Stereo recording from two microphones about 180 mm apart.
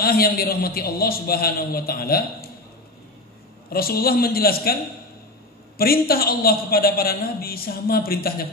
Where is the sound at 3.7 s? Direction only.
55° left (ahead or behind).